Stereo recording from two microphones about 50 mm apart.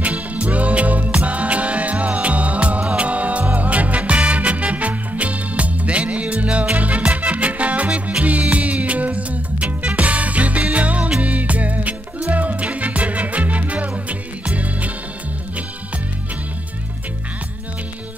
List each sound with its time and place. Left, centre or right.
0.0 s music: right